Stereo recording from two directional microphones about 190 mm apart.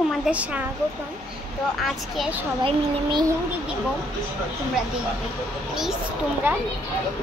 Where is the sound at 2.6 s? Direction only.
25° right (ahead or behind).